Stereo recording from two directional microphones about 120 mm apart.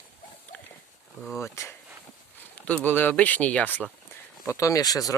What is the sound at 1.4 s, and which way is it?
Speech, 25° left (ahead or behind).